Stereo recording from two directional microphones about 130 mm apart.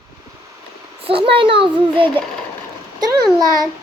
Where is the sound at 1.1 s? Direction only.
45° right (ahead or behind).